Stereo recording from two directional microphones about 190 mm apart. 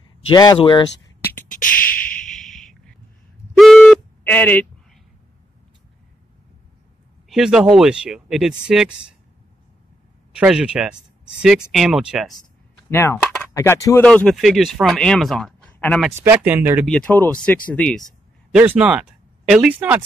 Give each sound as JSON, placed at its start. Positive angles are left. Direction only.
{"t": 0.3, "sound": "speech", "side_deg": 20}
{"t": 1.2, "sound": "beatboxing", "side_deg": 10}
{"t": 2.1, "sound": "a sound", "side_deg": 0}
{"t": 4.2, "sound": "speech", "side_deg": 10}
{"t": 7.2, "sound": "speech", "side_deg": 0}
{"t": 10.4, "sound": "speech", "side_deg": -5}
{"t": 12.9, "sound": "speech", "side_deg": 15}
{"t": 14.0, "sound": "speech", "side_deg": 5}
{"t": 16.1, "sound": "speech", "side_deg": -10}
{"t": 16.8, "sound": "speech", "side_deg": 5}
{"t": 18.5, "sound": "speech", "side_deg": -5}